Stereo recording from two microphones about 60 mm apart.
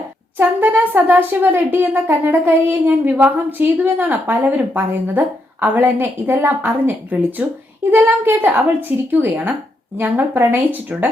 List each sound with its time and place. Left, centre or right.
0.3 s speech: right